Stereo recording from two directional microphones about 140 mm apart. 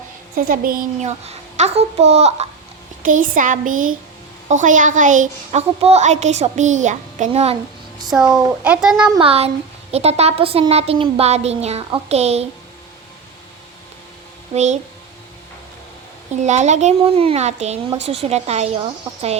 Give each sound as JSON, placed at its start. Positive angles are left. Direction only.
{"t": 0.3, "sound": "a woman's voice", "side_deg": -85}
{"t": 1.0, "sound": "speech", "side_deg": -50}
{"t": 3.0, "sound": "a child's voice", "side_deg": -75}
{"t": 8.0, "sound": "speech", "side_deg": -5}
{"t": 9.1, "sound": "speech", "side_deg": -45}
{"t": 14.5, "sound": "a woman's voice", "side_deg": -55}
{"t": 16.4, "sound": "speech", "side_deg": -55}